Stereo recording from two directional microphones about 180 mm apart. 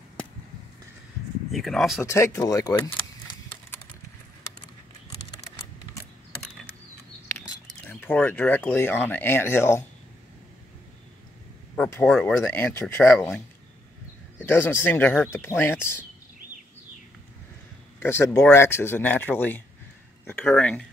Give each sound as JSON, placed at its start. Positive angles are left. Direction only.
{"t": 1.5, "sound": "speech", "side_deg": 0}
{"t": 2.0, "sound": "speech", "side_deg": 15}
{"t": 7.8, "sound": "speech", "side_deg": 10}
{"t": 11.7, "sound": "speech", "side_deg": 5}
{"t": 14.5, "sound": "speech", "side_deg": 10}
{"t": 15.6, "sound": "a sound", "side_deg": 15}
{"t": 17.9, "sound": "speech", "side_deg": 15}